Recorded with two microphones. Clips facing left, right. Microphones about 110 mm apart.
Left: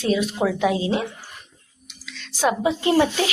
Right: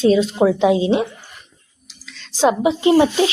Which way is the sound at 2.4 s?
20° right (ahead or behind).